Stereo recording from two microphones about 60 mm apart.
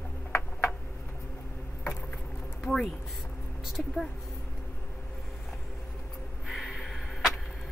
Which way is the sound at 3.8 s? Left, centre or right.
Centre.